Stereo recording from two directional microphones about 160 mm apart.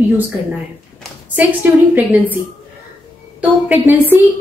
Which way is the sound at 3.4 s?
10° right (ahead or behind).